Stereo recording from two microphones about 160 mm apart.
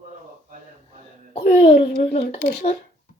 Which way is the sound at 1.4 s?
50° left (ahead or behind).